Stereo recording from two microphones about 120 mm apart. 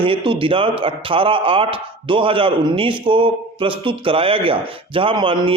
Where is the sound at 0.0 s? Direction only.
45° right (ahead or behind).